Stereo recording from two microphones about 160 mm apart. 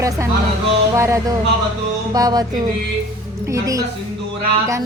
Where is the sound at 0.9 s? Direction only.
20° right (ahead or behind).